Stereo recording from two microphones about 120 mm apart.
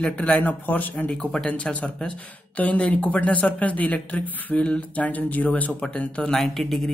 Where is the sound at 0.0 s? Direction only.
10° left (ahead or behind).